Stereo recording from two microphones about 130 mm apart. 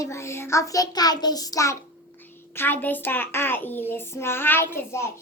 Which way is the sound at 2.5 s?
15° left (ahead or behind).